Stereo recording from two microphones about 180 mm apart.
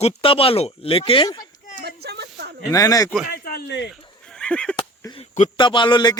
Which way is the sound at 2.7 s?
20° left (ahead or behind).